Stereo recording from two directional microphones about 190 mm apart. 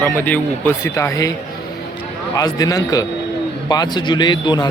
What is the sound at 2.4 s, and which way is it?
A man's voice, 20° left (ahead or behind).